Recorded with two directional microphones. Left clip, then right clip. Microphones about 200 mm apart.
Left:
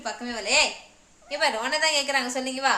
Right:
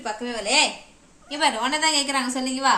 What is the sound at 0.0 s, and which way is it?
Speech, 15° left (ahead or behind).